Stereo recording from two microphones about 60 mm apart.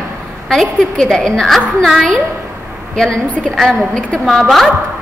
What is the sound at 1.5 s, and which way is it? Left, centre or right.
Speech, centre.